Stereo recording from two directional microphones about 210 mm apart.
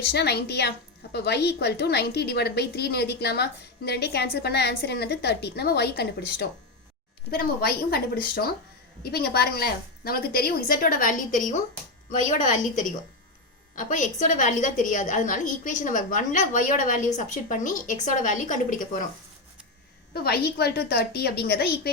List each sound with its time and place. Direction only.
0.1 s a woman's voice: 50° left (ahead or behind)
20.1 s a woman's voice: 50° left (ahead or behind)